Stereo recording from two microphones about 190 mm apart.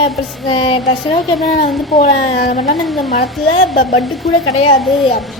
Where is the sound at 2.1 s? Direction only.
35° left (ahead or behind).